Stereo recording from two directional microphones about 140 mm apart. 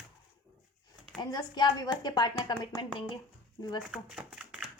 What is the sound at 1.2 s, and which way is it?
Speech, 30° left (ahead or behind).